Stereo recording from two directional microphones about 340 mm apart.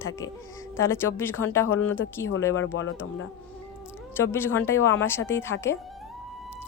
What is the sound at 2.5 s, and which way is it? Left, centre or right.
Speech, left.